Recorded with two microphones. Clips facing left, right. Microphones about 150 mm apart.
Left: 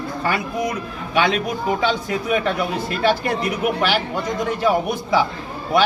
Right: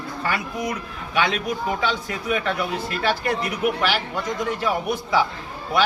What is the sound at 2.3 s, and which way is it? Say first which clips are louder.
Speech: left 3 dB; 20° left (ahead or behind).